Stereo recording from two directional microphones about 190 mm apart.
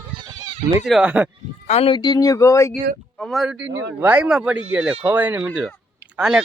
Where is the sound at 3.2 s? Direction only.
Centre (ahead or behind).